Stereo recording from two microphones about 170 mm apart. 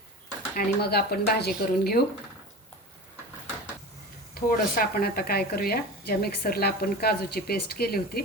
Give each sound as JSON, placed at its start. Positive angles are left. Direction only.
{"t": 0.5, "sound": "speech", "side_deg": 70}
{"t": 4.4, "sound": "speech", "side_deg": 60}